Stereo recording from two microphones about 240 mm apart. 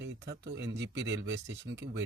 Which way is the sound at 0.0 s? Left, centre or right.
Right.